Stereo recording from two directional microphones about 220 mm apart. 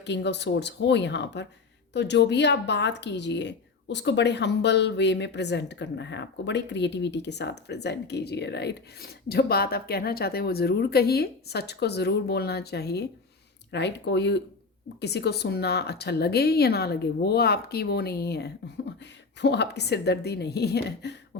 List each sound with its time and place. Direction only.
0.0 s a woman's voice: 50° left (ahead or behind)